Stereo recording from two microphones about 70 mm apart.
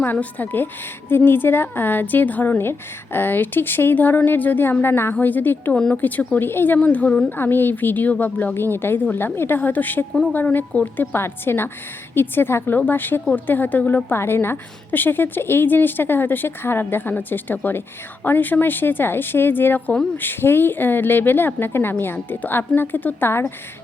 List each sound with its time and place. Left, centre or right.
0.0 s a woman's voice: left
5.7 s speech: centre
6.0 s a woman's voice: left
11.1 s a woman's voice: left